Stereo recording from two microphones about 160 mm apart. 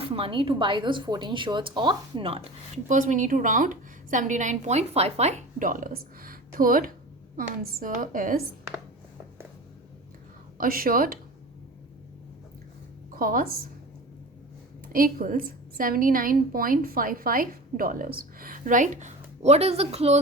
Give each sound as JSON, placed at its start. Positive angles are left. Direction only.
{"t": 0.0, "sound": "a woman's voice", "side_deg": -35}
{"t": 2.9, "sound": "a woman's voice", "side_deg": -55}
{"t": 10.6, "sound": "a woman's voice", "side_deg": -65}
{"t": 13.1, "sound": "a woman's voice", "side_deg": -60}
{"t": 14.9, "sound": "a woman's voice", "side_deg": -60}